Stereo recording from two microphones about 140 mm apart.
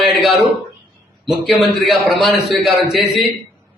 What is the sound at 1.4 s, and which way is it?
A man's voice, centre (ahead or behind).